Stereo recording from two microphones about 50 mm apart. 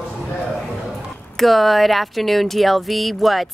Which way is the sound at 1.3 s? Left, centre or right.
Centre.